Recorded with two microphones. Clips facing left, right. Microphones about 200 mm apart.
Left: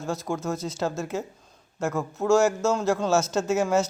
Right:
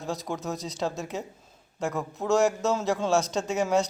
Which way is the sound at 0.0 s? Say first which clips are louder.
Left 3 dB; centre (ahead or behind).